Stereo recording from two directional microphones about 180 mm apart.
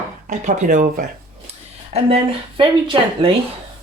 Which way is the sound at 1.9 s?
35° right (ahead or behind).